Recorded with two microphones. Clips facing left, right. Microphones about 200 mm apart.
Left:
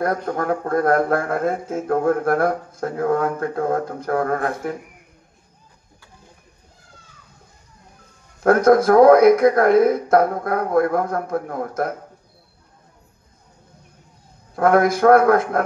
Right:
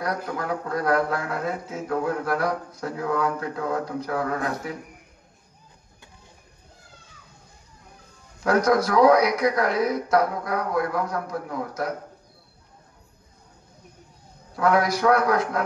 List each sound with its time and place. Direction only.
0.0 s speech: 50° left (ahead or behind)
8.4 s speech: 50° left (ahead or behind)
14.5 s speech: 50° left (ahead or behind)